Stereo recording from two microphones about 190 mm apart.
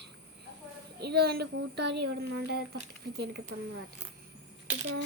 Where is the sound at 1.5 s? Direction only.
65° right (ahead or behind).